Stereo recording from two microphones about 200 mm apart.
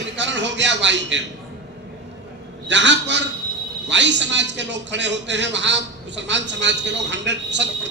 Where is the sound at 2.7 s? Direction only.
65° right (ahead or behind).